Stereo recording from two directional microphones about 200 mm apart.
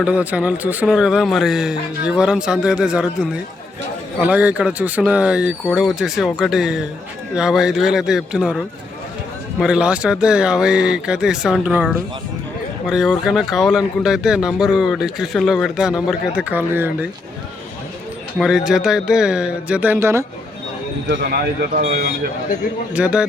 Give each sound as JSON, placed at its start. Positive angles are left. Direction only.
{"t": 0.0, "sound": "speech", "side_deg": -5}
{"t": 18.3, "sound": "speech", "side_deg": 0}
{"t": 21.2, "sound": "speech", "side_deg": -45}
{"t": 23.0, "sound": "speech", "side_deg": -5}